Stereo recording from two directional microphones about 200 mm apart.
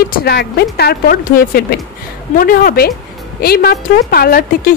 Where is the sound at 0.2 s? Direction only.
55° left (ahead or behind).